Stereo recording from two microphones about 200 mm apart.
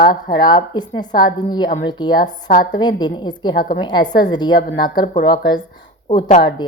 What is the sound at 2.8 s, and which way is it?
A woman's voice, 20° left (ahead or behind).